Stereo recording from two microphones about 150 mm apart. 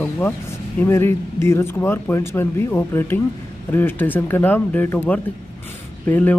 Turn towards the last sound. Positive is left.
turn(degrees=10)  # may be behind; listen again after turning